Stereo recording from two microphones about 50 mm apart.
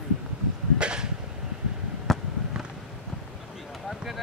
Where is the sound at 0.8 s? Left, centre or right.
Centre.